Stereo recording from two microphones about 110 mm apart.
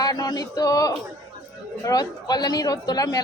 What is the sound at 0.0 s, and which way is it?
Speech, 35° left (ahead or behind).